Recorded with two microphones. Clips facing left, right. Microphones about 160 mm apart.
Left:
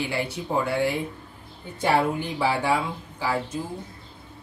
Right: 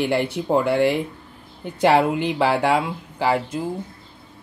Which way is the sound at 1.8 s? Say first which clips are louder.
Right 5 dB; 90° right.